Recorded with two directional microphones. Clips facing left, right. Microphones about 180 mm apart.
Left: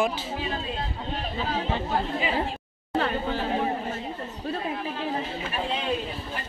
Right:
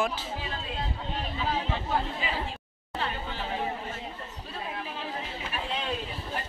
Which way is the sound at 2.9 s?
45° left (ahead or behind).